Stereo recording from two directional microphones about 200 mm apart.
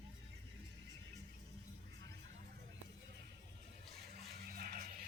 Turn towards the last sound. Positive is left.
turn(degrees=-45)  # may be behind; listen again after turning